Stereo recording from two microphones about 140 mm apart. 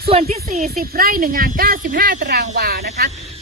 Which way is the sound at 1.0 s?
90° right.